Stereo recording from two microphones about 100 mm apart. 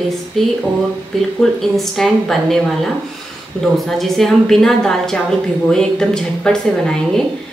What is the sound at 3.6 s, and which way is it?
A woman's voice, centre (ahead or behind).